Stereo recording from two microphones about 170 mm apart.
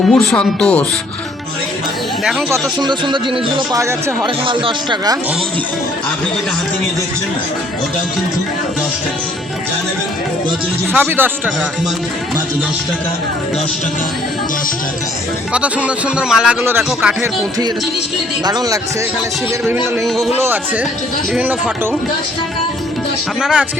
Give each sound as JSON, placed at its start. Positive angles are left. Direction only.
{"t": 0.1, "sound": "speech", "side_deg": 5}
{"t": 2.5, "sound": "speech", "side_deg": -25}
{"t": 10.9, "sound": "speech", "side_deg": -10}
{"t": 15.5, "sound": "speech", "side_deg": -5}
{"t": 18.4, "sound": "speech", "side_deg": -20}
{"t": 20.1, "sound": "speech", "side_deg": 0}
{"t": 20.4, "sound": "speech", "side_deg": -10}
{"t": 23.4, "sound": "speech", "side_deg": -5}